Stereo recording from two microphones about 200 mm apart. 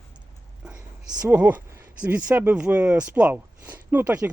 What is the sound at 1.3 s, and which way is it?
Speech, 10° right (ahead or behind).